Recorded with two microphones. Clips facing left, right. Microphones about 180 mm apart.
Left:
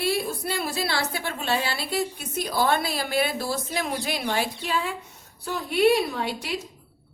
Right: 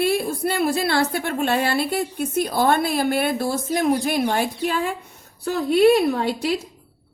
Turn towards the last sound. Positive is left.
turn(degrees=-55)  # may be behind; listen again after turning